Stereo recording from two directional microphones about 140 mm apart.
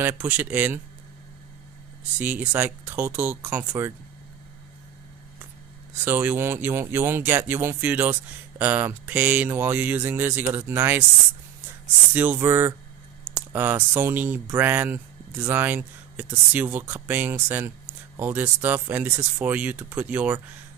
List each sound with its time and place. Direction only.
0.2 s speech: 10° right (ahead or behind)
2.1 s speech: 10° right (ahead or behind)
6.0 s speech: 15° right (ahead or behind)
12.1 s speech: 15° right (ahead or behind)